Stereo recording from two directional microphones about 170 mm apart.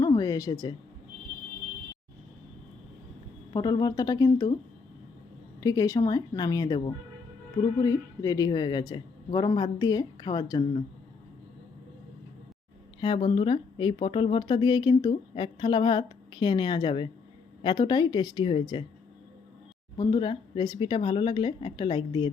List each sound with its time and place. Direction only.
0.2 s speech: 20° left (ahead or behind)
3.5 s speech: 25° left (ahead or behind)
5.5 s speech: 20° left (ahead or behind)
13.0 s speech: 25° left (ahead or behind)
20.0 s speech: 25° left (ahead or behind)